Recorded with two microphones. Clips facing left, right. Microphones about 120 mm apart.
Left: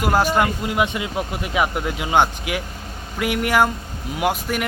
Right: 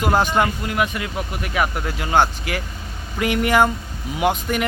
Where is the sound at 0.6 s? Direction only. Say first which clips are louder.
Left 1 dB; 20° left (ahead or behind).